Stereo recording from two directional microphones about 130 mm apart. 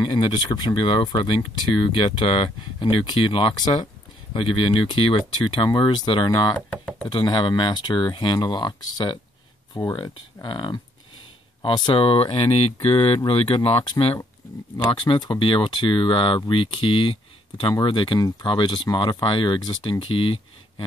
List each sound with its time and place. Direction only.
0.0 s speech: 40° left (ahead or behind)
6.7 s speech: 10° left (ahead or behind)
7.1 s speech: 35° left (ahead or behind)